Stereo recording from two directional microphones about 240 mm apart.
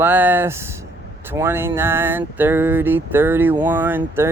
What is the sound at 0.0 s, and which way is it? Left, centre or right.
Speech, centre.